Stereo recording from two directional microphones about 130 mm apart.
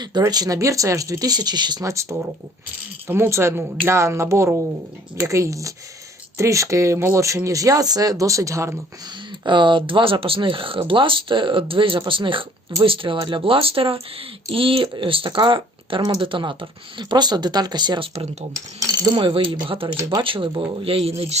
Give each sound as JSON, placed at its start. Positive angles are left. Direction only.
{"t": 0.2, "sound": "speech", "side_deg": -30}
{"t": 1.9, "sound": "speech", "side_deg": -25}
{"t": 9.4, "sound": "speech", "side_deg": -35}
{"t": 18.5, "sound": "speech", "side_deg": -25}
{"t": 19.1, "sound": "speech", "side_deg": -40}